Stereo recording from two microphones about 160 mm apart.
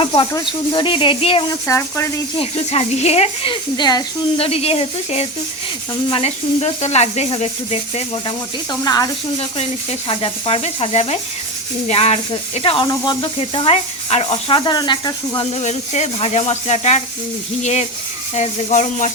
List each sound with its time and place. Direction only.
0.0 s speech: 35° left (ahead or behind)
1.6 s speech: 20° left (ahead or behind)
2.4 s speech: 40° left (ahead or behind); by 4.0 s 25° left (ahead or behind)
4.4 s speech: 40° left (ahead or behind)
8.7 s speech: 25° left (ahead or behind)
9.4 s speech: 40° left (ahead or behind)
15.5 s speech: 45° left (ahead or behind)